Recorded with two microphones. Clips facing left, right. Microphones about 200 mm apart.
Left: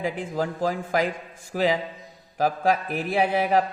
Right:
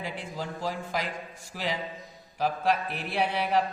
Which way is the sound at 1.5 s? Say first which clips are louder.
Left 10 dB; 90° left.